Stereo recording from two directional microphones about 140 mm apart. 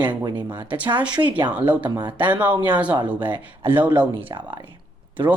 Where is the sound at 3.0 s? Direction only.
10° right (ahead or behind).